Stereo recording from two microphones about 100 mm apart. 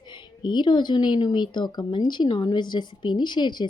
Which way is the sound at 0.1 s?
50° left (ahead or behind).